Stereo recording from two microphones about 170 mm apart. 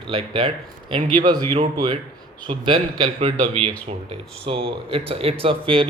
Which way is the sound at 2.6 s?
30° right (ahead or behind).